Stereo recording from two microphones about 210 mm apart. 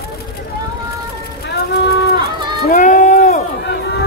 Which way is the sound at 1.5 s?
50° left (ahead or behind).